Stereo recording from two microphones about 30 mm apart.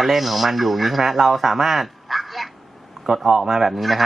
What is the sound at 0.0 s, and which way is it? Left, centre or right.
A man's voice, centre.